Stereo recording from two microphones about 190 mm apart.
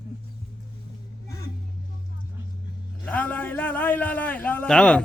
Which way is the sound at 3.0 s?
10° left (ahead or behind).